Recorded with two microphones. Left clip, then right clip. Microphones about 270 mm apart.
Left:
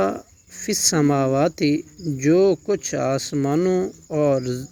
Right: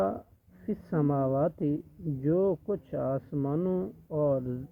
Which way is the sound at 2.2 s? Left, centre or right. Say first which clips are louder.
Left 10 dB; left.